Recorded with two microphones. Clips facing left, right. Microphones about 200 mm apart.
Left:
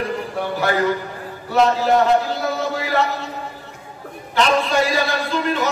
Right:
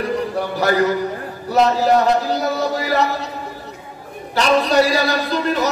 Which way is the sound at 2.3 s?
40° right (ahead or behind).